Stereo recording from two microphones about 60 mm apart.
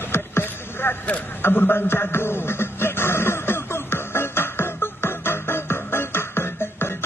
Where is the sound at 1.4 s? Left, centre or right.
Left.